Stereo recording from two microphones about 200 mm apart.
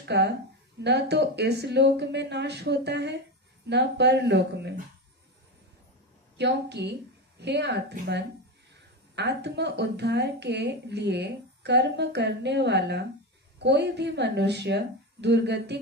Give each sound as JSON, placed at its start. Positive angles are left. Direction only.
{"t": 0.0, "sound": "a woman's voice", "side_deg": -55}
{"t": 6.3, "sound": "speech", "side_deg": -60}